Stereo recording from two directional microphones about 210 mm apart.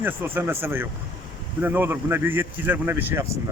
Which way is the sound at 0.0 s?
10° right (ahead or behind).